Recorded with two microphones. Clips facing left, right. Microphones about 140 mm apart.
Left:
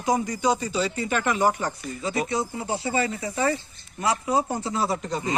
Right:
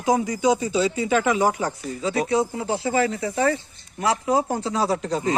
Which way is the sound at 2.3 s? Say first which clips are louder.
Right 5 dB; 90° right.